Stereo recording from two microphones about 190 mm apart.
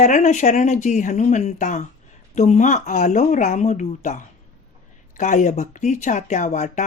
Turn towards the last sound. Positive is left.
turn(degrees=40)  # may be behind; listen again after turning